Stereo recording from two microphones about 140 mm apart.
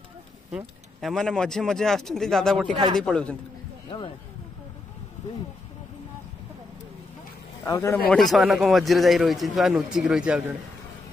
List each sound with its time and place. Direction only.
0.5 s a man's voice: 5° right (ahead or behind)
7.6 s a man's voice: 20° left (ahead or behind)
8.1 s a man's voice: centre (ahead or behind)